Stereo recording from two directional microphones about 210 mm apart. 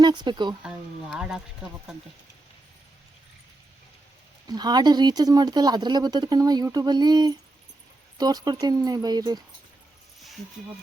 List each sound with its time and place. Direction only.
0.0 s speech: 20° right (ahead or behind)
0.6 s speech: 5° right (ahead or behind)
4.4 s speech: 20° right (ahead or behind)